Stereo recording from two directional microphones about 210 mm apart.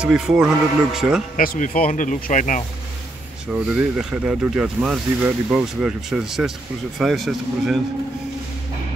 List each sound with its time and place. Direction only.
0.0 s speech: 5° right (ahead or behind)
1.3 s speech: 40° left (ahead or behind)
3.5 s speech: 5° right (ahead or behind)